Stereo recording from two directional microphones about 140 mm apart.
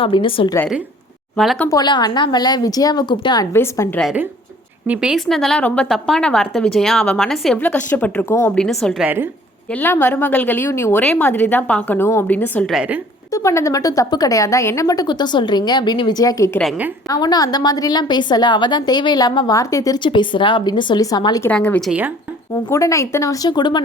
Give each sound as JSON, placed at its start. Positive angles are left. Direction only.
{"t": 0.0, "sound": "a woman's voice", "side_deg": 40}
{"t": 1.4, "sound": "a woman's voice", "side_deg": 0}
{"t": 1.7, "sound": "a woman's voice", "side_deg": 30}
{"t": 3.5, "sound": "a woman's voice", "side_deg": 15}
{"t": 4.9, "sound": "a woman's voice", "side_deg": -5}
{"t": 8.5, "sound": "a woman's voice", "side_deg": 5}
{"t": 9.0, "sound": "a woman's voice", "side_deg": -15}
{"t": 9.7, "sound": "a woman's voice", "side_deg": 15}
{"t": 12.7, "sound": "a woman's voice", "side_deg": -10}
{"t": 13.3, "sound": "a woman's voice", "side_deg": 20}
{"t": 20.1, "sound": "a woman's voice", "side_deg": 35}
{"t": 21.5, "sound": "a woman's voice", "side_deg": 10}
{"t": 21.8, "sound": "a woman's voice", "side_deg": -10}
{"t": 22.5, "sound": "a woman's voice", "side_deg": 25}